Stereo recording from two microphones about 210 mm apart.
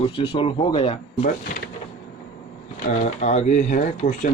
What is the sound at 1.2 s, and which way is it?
Speech, 45° left (ahead or behind).